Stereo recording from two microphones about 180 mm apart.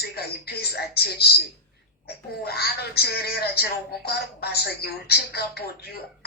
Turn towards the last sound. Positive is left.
turn(degrees=65)  # may be behind; listen again after turning